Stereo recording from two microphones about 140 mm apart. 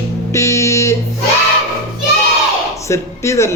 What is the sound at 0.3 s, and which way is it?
Music, 20° left (ahead or behind).